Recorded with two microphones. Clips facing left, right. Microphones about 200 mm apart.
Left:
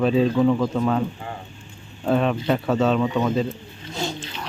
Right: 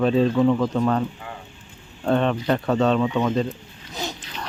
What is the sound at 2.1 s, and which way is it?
Speech, 5° left (ahead or behind).